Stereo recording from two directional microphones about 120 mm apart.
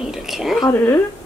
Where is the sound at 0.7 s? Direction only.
15° left (ahead or behind).